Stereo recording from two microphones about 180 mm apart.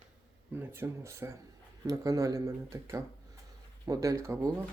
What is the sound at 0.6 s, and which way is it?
Speech, 15° right (ahead or behind).